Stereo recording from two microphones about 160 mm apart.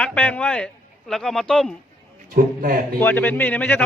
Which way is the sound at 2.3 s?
60° right (ahead or behind).